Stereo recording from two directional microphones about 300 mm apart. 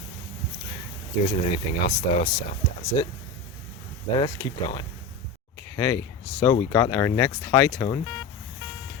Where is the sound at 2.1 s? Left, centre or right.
Centre.